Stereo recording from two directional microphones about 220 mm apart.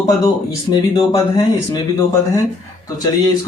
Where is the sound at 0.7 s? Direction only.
20° left (ahead or behind).